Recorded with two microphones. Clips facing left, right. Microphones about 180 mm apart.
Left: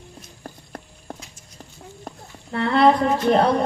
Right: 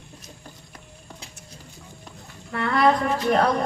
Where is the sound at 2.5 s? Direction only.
25° left (ahead or behind).